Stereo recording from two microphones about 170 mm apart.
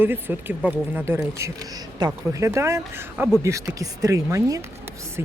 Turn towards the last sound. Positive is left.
turn(degrees=-20)  # may be behind; listen again after turning